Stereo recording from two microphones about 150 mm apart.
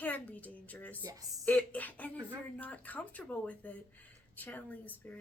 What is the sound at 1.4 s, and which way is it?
Speech, 10° left (ahead or behind).